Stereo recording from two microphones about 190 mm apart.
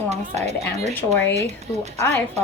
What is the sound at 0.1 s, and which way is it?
Speech, 35° right (ahead or behind).